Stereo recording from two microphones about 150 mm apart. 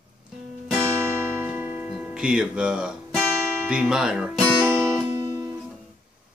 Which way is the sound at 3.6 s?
5° right (ahead or behind).